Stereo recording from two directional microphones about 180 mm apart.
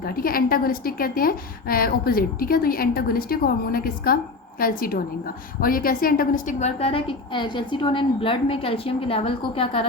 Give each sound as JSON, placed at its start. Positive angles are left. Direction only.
{"t": 0.2, "sound": "a woman's voice", "side_deg": 55}